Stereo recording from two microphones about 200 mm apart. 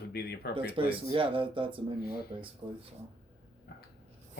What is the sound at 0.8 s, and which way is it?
Speech, 25° right (ahead or behind).